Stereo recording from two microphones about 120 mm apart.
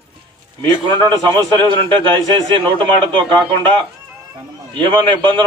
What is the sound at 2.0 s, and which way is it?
A man's voice, 45° right (ahead or behind).